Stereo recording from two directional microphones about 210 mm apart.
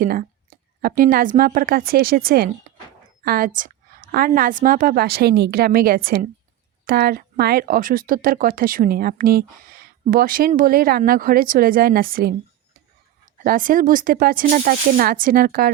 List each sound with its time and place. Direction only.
0.0 s a woman's voice: 40° right (ahead or behind)
13.4 s speech: 40° right (ahead or behind)